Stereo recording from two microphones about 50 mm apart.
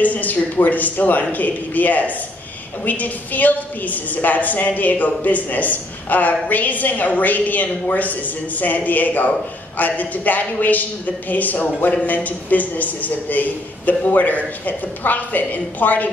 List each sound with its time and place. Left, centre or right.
0.0 s a woman's voice: left